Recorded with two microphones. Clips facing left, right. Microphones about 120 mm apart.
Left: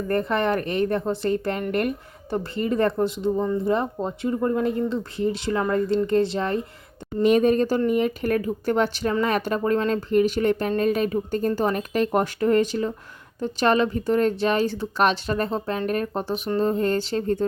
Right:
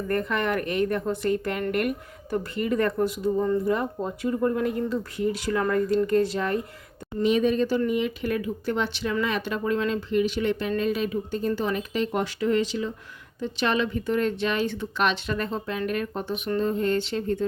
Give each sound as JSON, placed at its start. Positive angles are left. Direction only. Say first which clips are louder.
{"t": 0.1, "sound": "speech", "louder": "left 3 dB", "side_deg": 30}
{"t": 7.2, "sound": "speech", "louder": "left 4 dB", "side_deg": 50}